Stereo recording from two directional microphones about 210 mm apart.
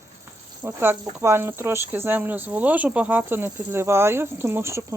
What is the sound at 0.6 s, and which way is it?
Speech, 10° right (ahead or behind).